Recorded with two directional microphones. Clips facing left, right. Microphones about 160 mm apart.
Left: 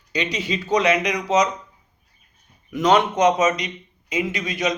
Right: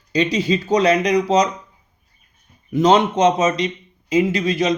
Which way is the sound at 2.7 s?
25° right (ahead or behind).